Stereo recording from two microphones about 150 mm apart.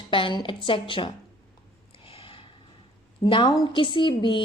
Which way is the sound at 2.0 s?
35° left (ahead or behind).